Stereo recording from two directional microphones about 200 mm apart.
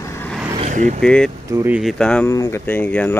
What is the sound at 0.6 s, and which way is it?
Vehicle, 40° right (ahead or behind).